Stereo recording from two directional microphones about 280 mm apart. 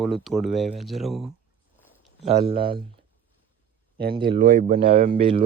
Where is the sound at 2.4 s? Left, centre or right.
Right.